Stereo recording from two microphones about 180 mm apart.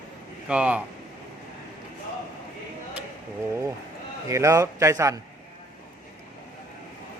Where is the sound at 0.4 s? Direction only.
5° right (ahead or behind).